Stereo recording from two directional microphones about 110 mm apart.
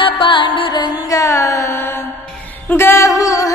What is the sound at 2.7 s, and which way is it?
Music, 20° left (ahead or behind).